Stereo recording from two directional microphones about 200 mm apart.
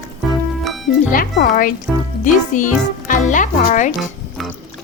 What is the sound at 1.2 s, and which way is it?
Speech, 45° left (ahead or behind).